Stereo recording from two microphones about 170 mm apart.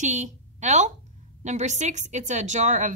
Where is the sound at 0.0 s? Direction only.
45° right (ahead or behind).